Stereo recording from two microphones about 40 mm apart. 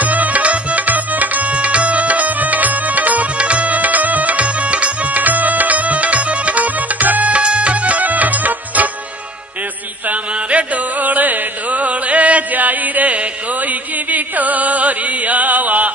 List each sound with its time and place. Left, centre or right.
0.0 s tabla: right
7.4 s music: right
10.0 s music: right